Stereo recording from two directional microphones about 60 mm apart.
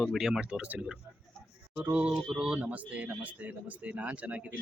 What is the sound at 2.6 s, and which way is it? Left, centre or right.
Speech, right.